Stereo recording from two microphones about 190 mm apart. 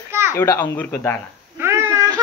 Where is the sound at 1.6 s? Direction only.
10° right (ahead or behind).